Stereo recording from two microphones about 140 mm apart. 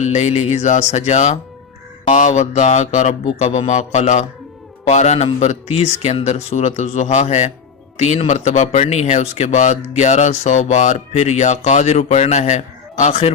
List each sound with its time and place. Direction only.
0.0 s a man's voice: 55° left (ahead or behind)